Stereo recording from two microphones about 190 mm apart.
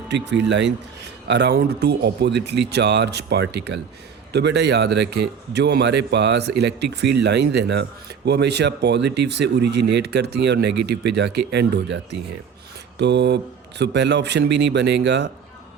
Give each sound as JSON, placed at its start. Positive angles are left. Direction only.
{"t": 0.1, "sound": "speech", "side_deg": -65}
{"t": 13.0, "sound": "speech", "side_deg": -65}